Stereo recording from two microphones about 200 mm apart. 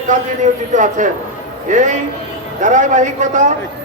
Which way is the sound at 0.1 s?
40° right (ahead or behind).